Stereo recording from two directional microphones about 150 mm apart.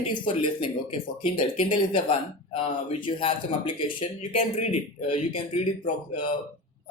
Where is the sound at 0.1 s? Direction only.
35° left (ahead or behind).